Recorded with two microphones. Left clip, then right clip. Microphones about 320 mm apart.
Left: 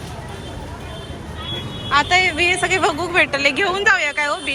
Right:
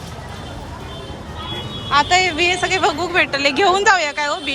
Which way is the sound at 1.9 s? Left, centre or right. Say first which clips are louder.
Right 1 dB; centre.